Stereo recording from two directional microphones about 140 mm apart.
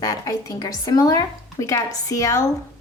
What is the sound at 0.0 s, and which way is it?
Speech, 25° left (ahead or behind).